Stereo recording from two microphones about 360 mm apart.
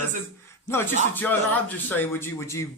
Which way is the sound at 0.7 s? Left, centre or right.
Centre.